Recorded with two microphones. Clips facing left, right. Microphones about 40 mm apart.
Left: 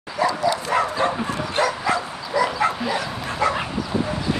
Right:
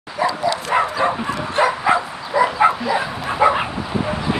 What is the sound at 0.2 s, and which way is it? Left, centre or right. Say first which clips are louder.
Bow-wow: right 1 dB; right.